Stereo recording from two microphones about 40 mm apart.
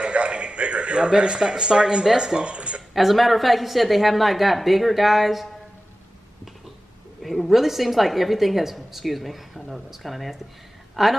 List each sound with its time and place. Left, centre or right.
0.0 s a sound: right
2.1 s speech: centre
2.9 s a woman's voice: centre
7.2 s a woman's voice: centre